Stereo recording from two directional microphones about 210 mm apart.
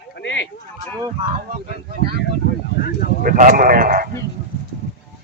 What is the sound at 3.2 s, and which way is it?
Speech, 40° right (ahead or behind).